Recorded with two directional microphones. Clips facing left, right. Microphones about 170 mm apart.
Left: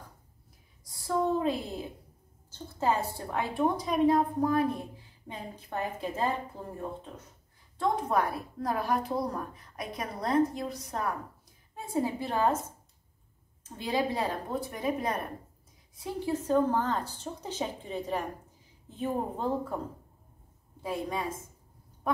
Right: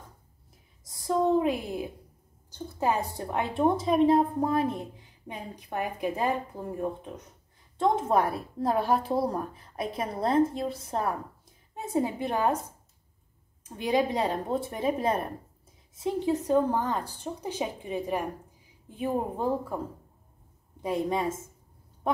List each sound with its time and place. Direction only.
0.8 s a sound: 20° right (ahead or behind)
2.5 s a woman's voice: 15° right (ahead or behind)
13.7 s a woman's voice: 15° right (ahead or behind)
20.8 s a woman's voice: 20° right (ahead or behind)